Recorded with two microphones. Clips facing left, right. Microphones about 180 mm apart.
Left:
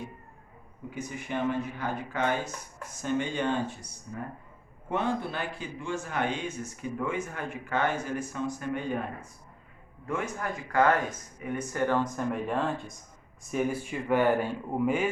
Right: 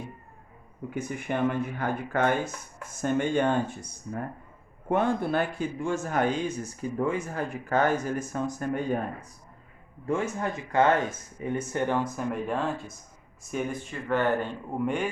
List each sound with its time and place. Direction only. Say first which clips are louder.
0.9 s speech: right 4 dB; 55° right (ahead or behind)
10.1 s speech: right 4 dB; 25° right (ahead or behind)
11.9 s speech: even; 5° right (ahead or behind)